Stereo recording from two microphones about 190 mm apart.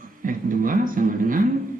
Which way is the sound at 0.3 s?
45° right (ahead or behind).